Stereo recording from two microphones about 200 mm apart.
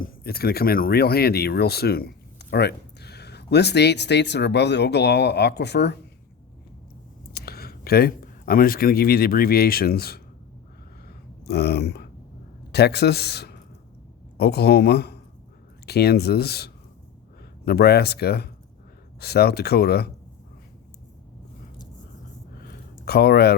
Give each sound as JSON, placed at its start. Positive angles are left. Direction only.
{"t": 0.0, "sound": "speech", "side_deg": 50}
{"t": 7.3, "sound": "speech", "side_deg": 50}
{"t": 11.4, "sound": "a man's voice", "side_deg": 55}
{"t": 23.0, "sound": "speech", "side_deg": 55}